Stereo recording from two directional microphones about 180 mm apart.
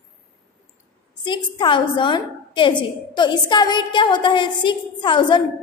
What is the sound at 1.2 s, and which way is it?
A woman's voice, 25° left (ahead or behind).